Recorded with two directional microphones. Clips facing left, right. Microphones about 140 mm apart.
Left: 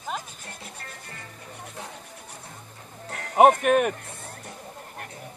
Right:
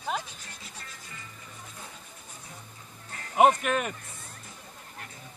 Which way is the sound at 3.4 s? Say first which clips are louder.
Left 5 dB; 55° left (ahead or behind).